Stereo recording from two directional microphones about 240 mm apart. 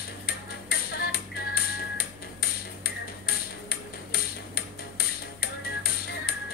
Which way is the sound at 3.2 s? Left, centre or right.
Left.